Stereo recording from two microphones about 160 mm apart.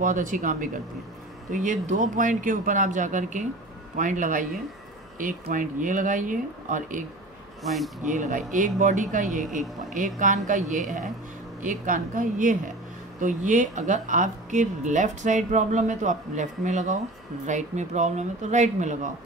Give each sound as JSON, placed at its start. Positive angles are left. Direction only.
{"t": 0.0, "sound": "speech", "side_deg": -55}
{"t": 7.6, "sound": "speech", "side_deg": 0}
{"t": 8.0, "sound": "speech", "side_deg": -50}